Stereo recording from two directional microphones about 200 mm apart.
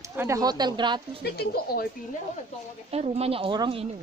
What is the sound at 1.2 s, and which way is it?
Speech, 50° left (ahead or behind).